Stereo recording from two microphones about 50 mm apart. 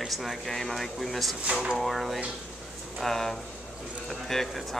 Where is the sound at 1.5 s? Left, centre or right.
Centre.